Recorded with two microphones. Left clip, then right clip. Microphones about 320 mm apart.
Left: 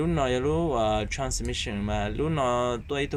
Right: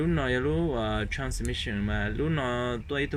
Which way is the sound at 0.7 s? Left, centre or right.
Centre.